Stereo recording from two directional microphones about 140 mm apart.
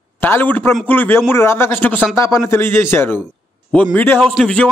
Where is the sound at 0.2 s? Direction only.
15° left (ahead or behind).